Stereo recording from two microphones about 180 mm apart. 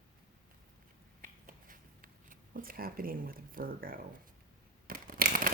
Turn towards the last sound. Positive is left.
turn(degrees=-50)  # may be behind; listen again after turning